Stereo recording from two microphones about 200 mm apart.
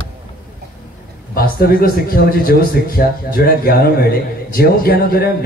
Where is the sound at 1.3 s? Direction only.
50° left (ahead or behind).